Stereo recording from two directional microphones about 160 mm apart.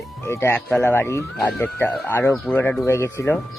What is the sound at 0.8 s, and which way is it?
Speech, 15° left (ahead or behind).